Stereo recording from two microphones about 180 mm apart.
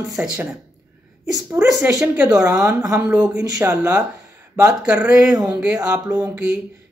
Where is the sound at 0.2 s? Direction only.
10° right (ahead or behind).